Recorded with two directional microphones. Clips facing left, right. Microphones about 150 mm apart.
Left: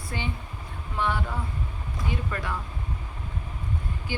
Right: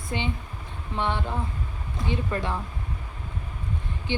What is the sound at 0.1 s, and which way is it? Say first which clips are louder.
A woman's voice: right 4 dB; 20° right (ahead or behind).